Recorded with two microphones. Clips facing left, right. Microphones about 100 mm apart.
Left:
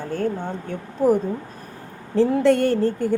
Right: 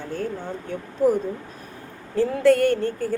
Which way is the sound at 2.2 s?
25° left (ahead or behind).